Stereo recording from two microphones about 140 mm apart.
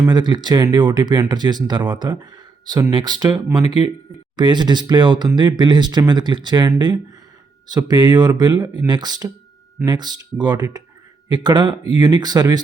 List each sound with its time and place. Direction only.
0.0 s speech: 30° right (ahead or behind)